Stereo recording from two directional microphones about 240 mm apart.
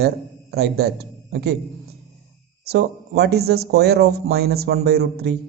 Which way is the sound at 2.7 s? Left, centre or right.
Right.